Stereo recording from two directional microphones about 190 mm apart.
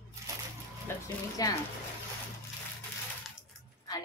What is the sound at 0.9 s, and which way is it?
Speech, 10° left (ahead or behind).